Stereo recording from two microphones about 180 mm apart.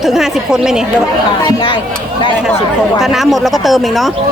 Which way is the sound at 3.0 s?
Centre (ahead or behind).